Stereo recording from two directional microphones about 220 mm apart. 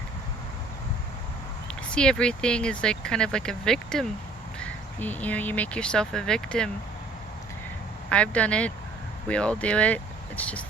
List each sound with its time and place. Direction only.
1.9 s speech: 5° left (ahead or behind)
8.1 s speech: 5° left (ahead or behind)